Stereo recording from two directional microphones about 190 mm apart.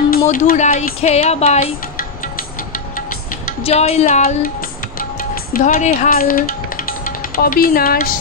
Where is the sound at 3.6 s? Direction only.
35° left (ahead or behind).